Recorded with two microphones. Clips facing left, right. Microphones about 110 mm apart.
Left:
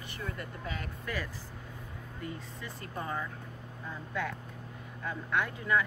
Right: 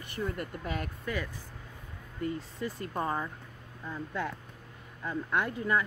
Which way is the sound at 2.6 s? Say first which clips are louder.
Right 7 dB; 30° right (ahead or behind).